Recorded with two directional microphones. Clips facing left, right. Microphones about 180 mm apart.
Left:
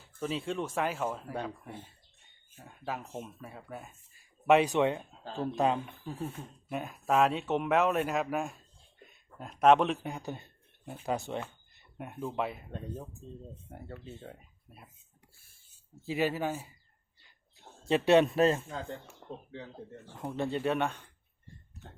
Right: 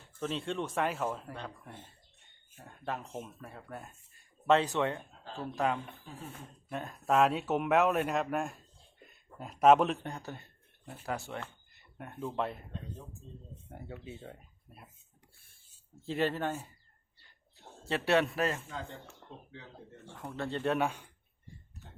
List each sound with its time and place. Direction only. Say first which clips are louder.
0.2 s a man's voice: left 1 dB; 5° left (ahead or behind)
7.0 s speech: even; centre (ahead or behind)
10.1 s a sound: left 3 dB; 15° left (ahead or behind)
11.0 s speech: left 4 dB; 20° left (ahead or behind)
13.7 s speech: right 3 dB; centre (ahead or behind)
16.0 s speech: left 1 dB; 10° left (ahead or behind)
17.8 s a man's voice: left 5 dB; 20° left (ahead or behind)
20.1 s speech: left 4 dB; 15° left (ahead or behind)
20.7 s speech: even; 5° right (ahead or behind)